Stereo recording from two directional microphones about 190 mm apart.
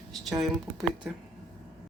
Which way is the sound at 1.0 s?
5° right (ahead or behind).